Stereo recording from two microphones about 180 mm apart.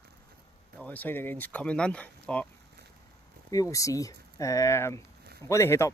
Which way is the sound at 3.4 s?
20° left (ahead or behind).